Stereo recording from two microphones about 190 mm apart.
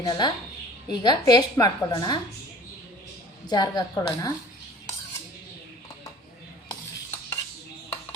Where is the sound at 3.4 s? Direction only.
20° left (ahead or behind).